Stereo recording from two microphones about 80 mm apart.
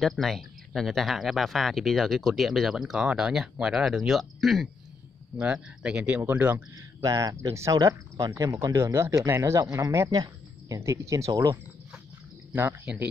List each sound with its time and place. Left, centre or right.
0.0 s speech: centre
5.4 s speech: centre
7.0 s speech: right
7.7 s speech: right
10.8 s speech: right